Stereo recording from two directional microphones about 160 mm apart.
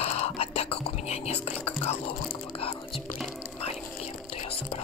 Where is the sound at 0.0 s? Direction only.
40° left (ahead or behind).